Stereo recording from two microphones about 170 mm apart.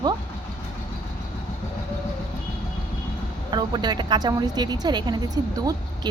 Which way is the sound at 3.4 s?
25° right (ahead or behind).